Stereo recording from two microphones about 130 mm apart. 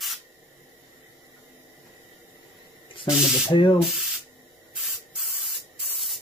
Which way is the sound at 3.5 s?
40° left (ahead or behind).